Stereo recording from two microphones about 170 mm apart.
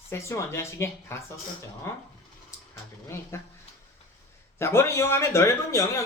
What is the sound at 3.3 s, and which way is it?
Speech, 15° left (ahead or behind).